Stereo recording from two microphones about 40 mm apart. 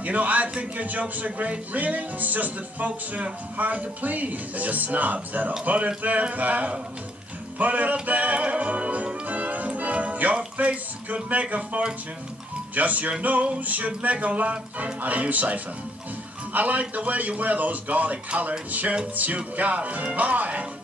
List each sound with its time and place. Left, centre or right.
0.0 s speech: right
7.5 s music: right
11.2 s speech: right
18.7 s music: right
19.1 s speech: right